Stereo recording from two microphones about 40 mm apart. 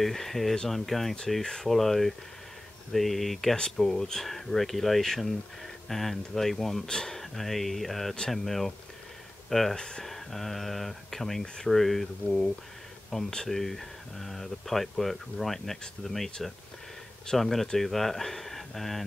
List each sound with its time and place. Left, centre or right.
0.0 s speech: centre
3.5 s speech: centre
9.8 s speech: centre
10.0 s speech: centre
17.4 s speech: centre